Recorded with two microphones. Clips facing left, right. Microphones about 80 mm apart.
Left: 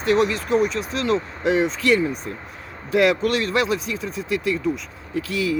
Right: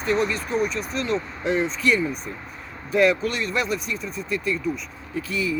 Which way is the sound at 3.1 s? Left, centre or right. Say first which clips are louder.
Left 3 dB; left.